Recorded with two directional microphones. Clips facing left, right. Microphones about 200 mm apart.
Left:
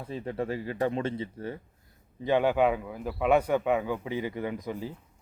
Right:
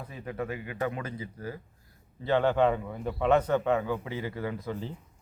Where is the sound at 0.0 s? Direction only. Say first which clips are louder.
Left 3 dB; 30° left (ahead or behind).